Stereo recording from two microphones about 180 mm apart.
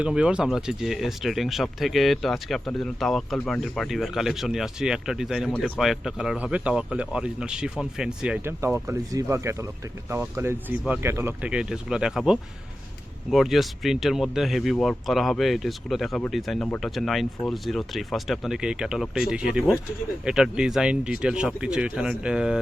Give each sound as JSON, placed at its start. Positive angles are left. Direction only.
{"t": 0.0, "sound": "speech", "side_deg": -5}
{"t": 8.6, "sound": "speech", "side_deg": -15}